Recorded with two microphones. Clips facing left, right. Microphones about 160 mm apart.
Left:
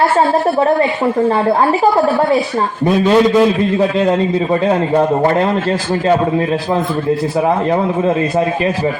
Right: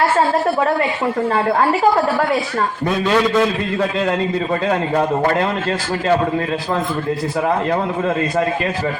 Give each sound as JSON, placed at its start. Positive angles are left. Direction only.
{"t": 2.8, "sound": "a man's voice", "side_deg": 20}